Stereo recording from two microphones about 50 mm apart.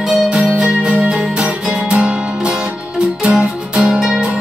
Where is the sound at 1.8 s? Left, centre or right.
Centre.